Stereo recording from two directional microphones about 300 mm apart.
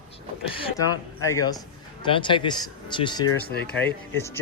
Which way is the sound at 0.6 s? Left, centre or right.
Centre.